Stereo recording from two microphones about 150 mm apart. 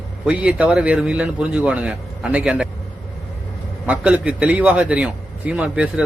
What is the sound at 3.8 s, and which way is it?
A man's voice, 10° right (ahead or behind).